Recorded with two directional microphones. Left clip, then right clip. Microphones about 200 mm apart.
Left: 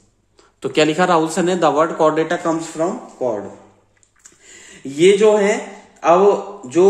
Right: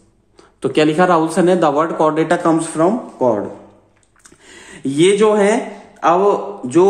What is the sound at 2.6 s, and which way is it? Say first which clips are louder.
Speech: right 6 dB; 20° right (ahead or behind).